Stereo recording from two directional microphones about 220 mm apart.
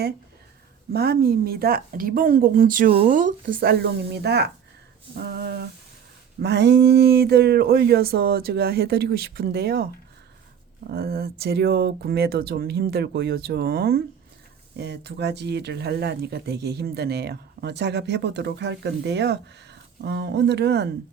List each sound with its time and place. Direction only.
0.9 s speech: 45° right (ahead or behind)
10.9 s speech: 45° right (ahead or behind)